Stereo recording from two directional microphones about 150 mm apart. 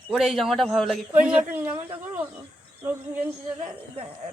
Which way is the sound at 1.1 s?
10° right (ahead or behind).